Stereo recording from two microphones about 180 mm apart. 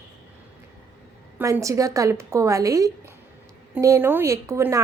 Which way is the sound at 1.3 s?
15° right (ahead or behind).